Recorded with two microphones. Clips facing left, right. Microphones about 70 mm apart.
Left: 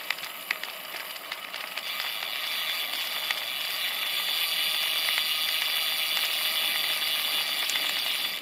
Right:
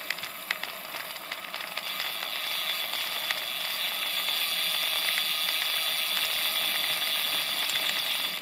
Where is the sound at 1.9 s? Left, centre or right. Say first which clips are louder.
Left 1 dB; left.